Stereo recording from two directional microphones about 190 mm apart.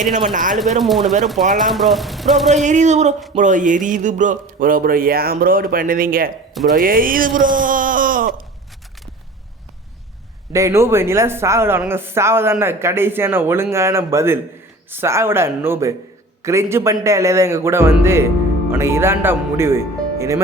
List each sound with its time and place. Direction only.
0.8 s speech: centre (ahead or behind)
2.6 s speech: 40° right (ahead or behind)
10.5 s speech: 15° right (ahead or behind)